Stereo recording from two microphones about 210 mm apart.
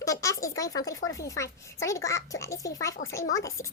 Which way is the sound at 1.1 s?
15° left (ahead or behind).